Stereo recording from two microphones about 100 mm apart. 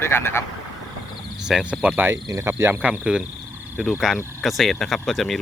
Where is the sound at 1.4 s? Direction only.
5° right (ahead or behind).